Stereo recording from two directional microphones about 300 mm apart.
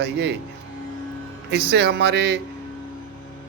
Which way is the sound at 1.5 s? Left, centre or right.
Right.